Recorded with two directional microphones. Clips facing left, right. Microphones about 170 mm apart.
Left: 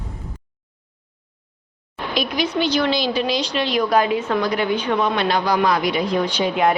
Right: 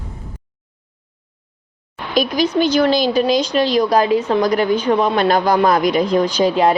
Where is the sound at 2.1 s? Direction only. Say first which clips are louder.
Right 6 dB; 45° right (ahead or behind).